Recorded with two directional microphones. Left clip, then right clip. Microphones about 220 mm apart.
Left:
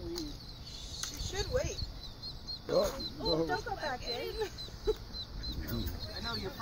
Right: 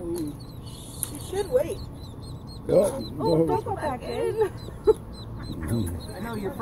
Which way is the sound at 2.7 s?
10° right (ahead or behind).